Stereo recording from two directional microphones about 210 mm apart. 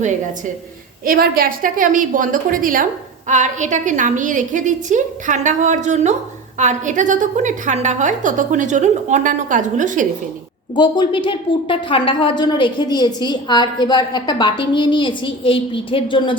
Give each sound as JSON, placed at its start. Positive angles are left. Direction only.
{"t": 0.0, "sound": "a woman's voice", "side_deg": -35}
{"t": 10.8, "sound": "a woman's voice", "side_deg": 20}